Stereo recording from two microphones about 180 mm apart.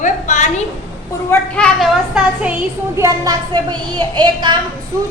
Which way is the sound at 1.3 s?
5° left (ahead or behind).